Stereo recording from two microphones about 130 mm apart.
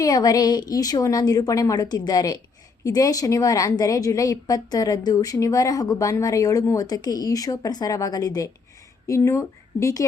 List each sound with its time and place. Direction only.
0.0 s a woman's voice: 30° left (ahead or behind)